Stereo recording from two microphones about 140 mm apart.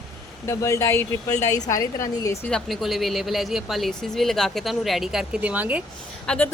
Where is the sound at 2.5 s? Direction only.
Centre (ahead or behind).